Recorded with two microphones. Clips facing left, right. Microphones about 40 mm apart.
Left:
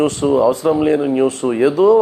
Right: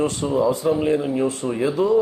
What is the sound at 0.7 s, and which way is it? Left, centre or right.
A man's voice, left.